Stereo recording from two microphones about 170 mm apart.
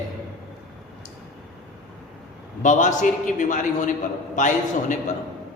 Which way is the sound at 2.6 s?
45° left (ahead or behind).